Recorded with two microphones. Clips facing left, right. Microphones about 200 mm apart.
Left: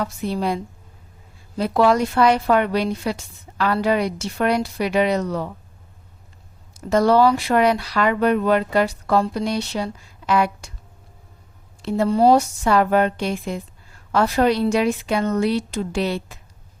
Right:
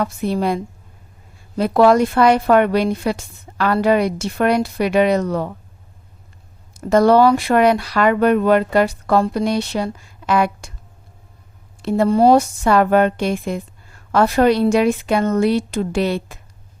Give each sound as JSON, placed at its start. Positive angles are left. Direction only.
{"t": 0.0, "sound": "a woman's voice", "side_deg": -55}
{"t": 6.7, "sound": "speech", "side_deg": -55}
{"t": 11.8, "sound": "a woman's voice", "side_deg": -55}